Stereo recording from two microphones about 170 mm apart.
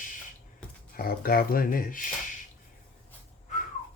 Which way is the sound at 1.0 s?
60° left (ahead or behind).